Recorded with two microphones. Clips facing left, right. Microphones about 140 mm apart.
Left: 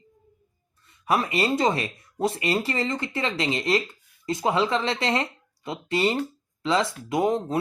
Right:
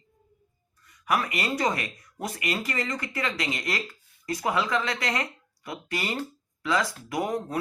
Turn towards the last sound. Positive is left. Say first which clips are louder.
# left 5 dB
turn(degrees=25)  # may be behind; listen again after turning